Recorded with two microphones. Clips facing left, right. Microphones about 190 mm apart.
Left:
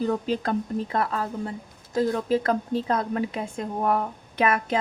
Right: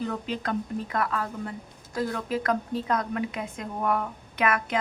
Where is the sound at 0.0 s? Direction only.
35° left (ahead or behind).